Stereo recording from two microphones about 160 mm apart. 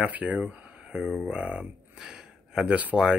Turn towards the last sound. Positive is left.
turn(degrees=-5)  # may be behind; listen again after turning